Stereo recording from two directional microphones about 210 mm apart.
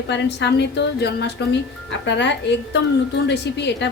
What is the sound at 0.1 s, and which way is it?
A woman's voice, 55° left (ahead or behind).